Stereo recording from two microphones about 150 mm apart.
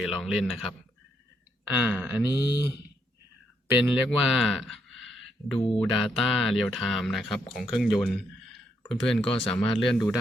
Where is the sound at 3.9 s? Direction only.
Centre (ahead or behind).